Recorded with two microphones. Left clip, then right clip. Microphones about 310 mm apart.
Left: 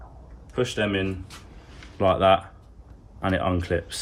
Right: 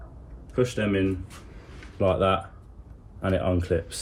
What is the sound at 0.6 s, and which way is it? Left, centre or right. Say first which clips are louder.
Speech: even; centre.